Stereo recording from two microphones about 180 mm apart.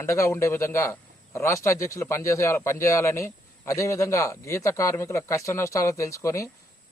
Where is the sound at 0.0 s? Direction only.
15° left (ahead or behind).